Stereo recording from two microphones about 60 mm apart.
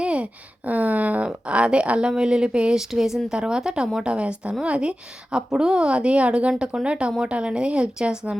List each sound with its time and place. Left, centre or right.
0.0 s a woman's voice: centre